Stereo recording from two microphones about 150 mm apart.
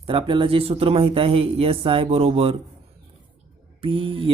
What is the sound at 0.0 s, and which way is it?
Speech, 35° right (ahead or behind).